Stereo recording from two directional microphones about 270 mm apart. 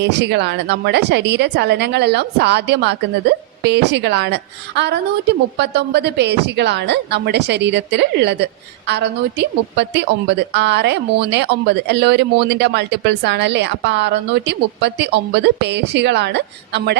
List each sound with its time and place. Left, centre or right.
0.0 s a woman's voice: right